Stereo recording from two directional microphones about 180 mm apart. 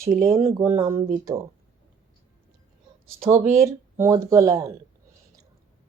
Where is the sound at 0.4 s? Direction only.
15° right (ahead or behind).